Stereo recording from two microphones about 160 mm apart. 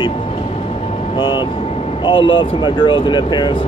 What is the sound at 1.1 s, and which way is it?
Speech, 30° left (ahead or behind).